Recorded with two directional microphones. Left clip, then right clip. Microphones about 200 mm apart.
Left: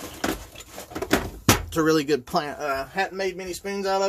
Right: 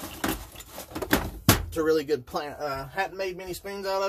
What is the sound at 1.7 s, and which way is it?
Speech, 40° left (ahead or behind).